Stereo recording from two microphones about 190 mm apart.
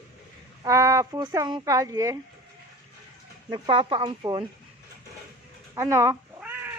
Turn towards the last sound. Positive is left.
turn(degrees=-10)  # may be behind; listen again after turning